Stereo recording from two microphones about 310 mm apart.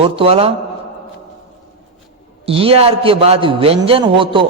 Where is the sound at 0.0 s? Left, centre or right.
Centre.